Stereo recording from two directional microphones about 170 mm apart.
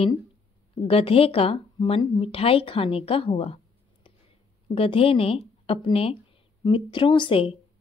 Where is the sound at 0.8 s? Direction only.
35° left (ahead or behind).